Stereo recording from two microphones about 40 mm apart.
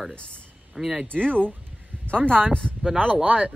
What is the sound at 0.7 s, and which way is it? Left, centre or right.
Speech, centre.